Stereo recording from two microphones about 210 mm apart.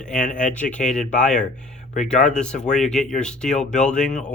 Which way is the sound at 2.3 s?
5° left (ahead or behind).